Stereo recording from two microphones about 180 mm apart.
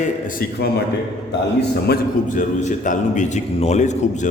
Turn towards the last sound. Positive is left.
turn(degrees=40)  # may be behind; listen again after turning